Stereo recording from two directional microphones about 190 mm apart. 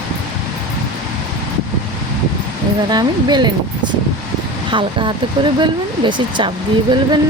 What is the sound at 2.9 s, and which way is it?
Speech, 20° right (ahead or behind).